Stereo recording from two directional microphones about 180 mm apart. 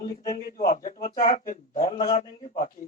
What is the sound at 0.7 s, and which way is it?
Speech, 45° left (ahead or behind).